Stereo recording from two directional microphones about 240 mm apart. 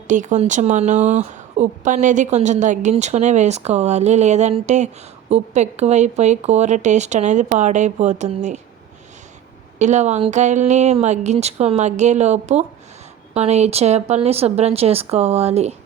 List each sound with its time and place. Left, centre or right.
0.1 s speech: right
9.7 s speech: right